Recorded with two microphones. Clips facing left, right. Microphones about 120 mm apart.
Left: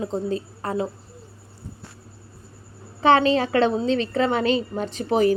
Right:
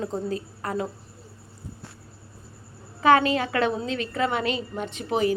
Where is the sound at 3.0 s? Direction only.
30° left (ahead or behind).